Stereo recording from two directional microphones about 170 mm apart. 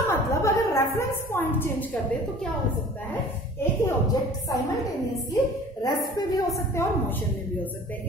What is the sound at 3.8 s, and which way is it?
A woman's voice, 20° left (ahead or behind).